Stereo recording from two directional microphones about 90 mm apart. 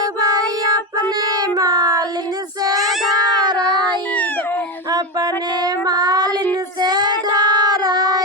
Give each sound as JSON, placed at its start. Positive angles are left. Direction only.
{"t": 0.0, "sound": "child singing", "side_deg": -45}
{"t": 2.7, "sound": "child singing", "side_deg": 0}
{"t": 3.4, "sound": "child singing", "side_deg": -50}
{"t": 4.9, "sound": "child singing", "side_deg": -45}